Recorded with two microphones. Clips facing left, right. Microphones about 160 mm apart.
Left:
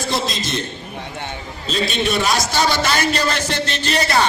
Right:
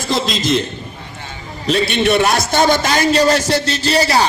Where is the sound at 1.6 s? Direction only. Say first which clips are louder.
Right 6 dB; 70° right (ahead or behind).